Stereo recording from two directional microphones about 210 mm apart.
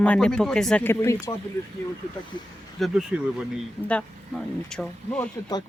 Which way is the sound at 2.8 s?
5° right (ahead or behind).